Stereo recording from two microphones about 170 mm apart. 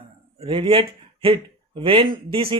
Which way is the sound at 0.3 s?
30° right (ahead or behind).